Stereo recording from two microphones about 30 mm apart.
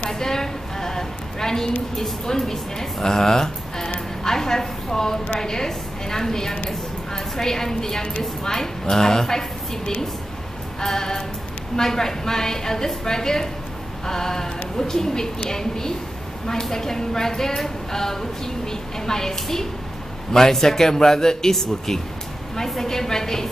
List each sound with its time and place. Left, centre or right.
0.1 s a sound: centre
2.2 s a woman's voice: centre
4.2 s a sound: centre
5.4 s a woman's voice: centre
10.8 s a woman's voice: centre
20.3 s a woman's voice: centre